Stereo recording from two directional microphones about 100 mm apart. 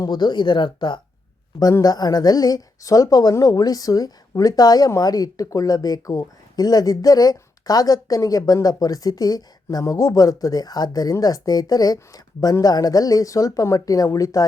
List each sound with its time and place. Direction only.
0.0 s speech: 45° left (ahead or behind)
1.8 s speech: 40° left (ahead or behind)